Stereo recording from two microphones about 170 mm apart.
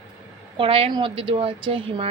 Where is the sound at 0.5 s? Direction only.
30° right (ahead or behind).